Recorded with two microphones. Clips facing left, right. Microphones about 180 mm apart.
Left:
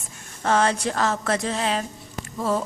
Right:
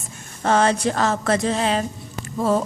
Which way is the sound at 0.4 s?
30° right (ahead or behind).